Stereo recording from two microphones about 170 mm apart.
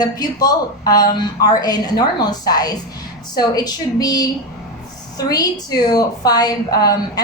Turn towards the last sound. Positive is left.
turn(degrees=20)  # may be behind; listen again after turning